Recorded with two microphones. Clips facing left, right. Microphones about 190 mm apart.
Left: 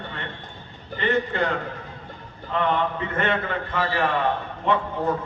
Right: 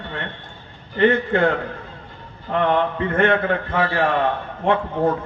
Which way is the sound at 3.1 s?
55° right (ahead or behind).